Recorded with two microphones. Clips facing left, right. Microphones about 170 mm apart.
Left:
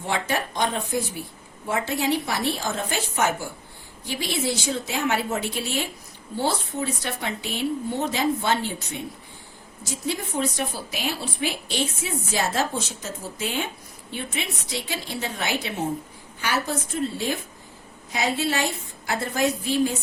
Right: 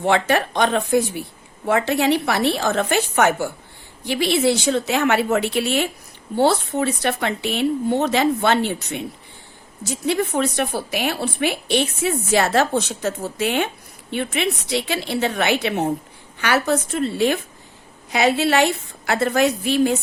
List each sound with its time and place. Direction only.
0.0 s a woman's voice: 70° right (ahead or behind)